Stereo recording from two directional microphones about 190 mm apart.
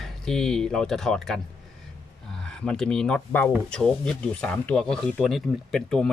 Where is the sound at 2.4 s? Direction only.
5° left (ahead or behind).